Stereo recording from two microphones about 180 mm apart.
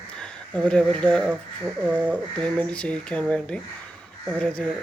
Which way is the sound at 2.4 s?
5° left (ahead or behind).